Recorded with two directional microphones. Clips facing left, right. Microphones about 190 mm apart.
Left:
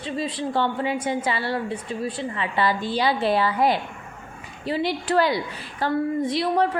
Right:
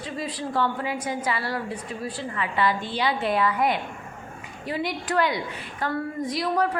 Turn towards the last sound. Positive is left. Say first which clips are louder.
# left 3 dB
turn(degrees=25)  # may be behind; listen again after turning